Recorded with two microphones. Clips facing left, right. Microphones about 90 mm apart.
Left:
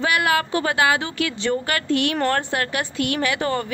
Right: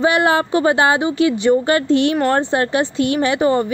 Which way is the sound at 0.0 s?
25° right (ahead or behind).